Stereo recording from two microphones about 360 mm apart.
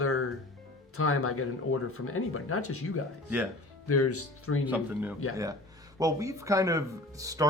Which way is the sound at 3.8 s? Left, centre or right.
Left.